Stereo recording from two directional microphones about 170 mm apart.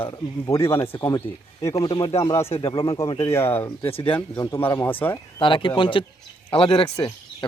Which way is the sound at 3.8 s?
30° left (ahead or behind).